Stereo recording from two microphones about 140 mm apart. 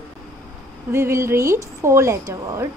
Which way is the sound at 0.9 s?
20° right (ahead or behind).